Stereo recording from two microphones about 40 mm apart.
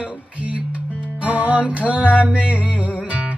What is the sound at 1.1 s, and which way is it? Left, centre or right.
Music, right.